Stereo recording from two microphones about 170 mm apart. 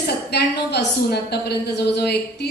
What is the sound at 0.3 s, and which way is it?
A woman's voice, 75° left (ahead or behind).